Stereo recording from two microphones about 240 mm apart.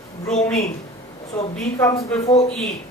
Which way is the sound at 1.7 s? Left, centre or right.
Centre.